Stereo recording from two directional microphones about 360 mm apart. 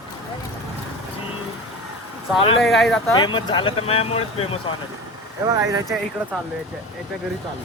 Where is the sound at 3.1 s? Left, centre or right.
Centre.